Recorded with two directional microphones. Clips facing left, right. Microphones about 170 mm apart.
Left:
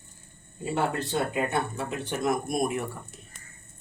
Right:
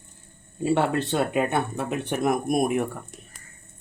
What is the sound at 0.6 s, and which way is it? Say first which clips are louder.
Speech: right 6 dB; 75° right (ahead or behind).